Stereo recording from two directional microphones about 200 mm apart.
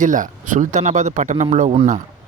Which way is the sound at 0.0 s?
40° right (ahead or behind).